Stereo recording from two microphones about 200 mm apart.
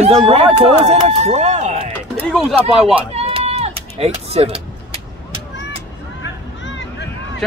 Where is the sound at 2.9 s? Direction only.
30° right (ahead or behind).